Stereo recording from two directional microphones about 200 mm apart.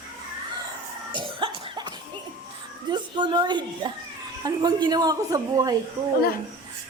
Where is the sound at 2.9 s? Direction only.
20° right (ahead or behind).